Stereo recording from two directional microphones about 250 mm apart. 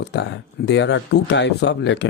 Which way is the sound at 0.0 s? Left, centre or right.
Left.